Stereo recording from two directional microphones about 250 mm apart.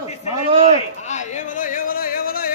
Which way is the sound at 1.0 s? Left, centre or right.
Left.